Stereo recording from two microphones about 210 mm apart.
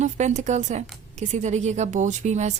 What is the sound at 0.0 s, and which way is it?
A woman's voice, 35° right (ahead or behind).